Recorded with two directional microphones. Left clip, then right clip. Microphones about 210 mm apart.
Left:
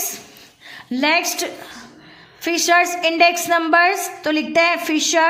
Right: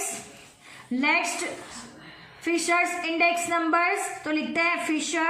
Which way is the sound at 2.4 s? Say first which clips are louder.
Left 8 dB; 45° left (ahead or behind).